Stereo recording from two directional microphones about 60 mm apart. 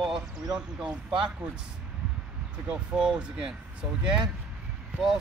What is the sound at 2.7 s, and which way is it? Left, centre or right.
Speech, centre.